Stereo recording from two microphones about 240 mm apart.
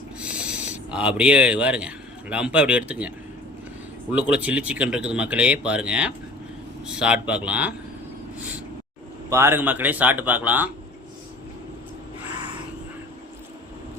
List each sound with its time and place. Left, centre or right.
0.2 s a sound: centre
2.3 s speech: centre
4.1 s speech: centre
9.3 s speech: centre